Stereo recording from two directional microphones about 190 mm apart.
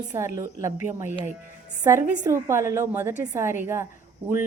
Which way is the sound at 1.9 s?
15° right (ahead or behind).